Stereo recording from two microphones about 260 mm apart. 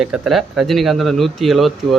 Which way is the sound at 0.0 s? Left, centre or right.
Centre.